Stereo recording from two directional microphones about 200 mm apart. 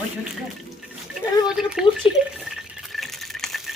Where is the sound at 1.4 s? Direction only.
5° right (ahead or behind).